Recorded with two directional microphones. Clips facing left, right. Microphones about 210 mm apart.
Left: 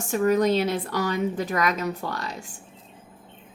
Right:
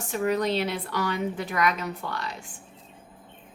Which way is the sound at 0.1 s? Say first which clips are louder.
Left 5 dB; 45° left (ahead or behind).